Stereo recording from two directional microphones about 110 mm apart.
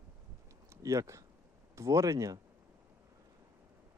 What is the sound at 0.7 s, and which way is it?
Speech, 30° right (ahead or behind).